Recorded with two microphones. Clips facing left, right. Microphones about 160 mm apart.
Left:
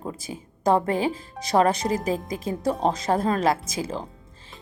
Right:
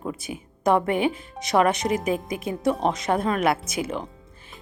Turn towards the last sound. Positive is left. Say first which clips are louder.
# right 1 dB
turn(degrees=30)  # may be behind; listen again after turning